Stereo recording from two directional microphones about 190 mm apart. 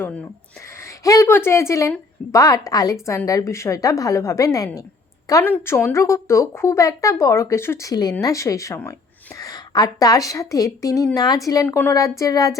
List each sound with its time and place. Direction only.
0.8 s a woman's voice: 15° left (ahead or behind)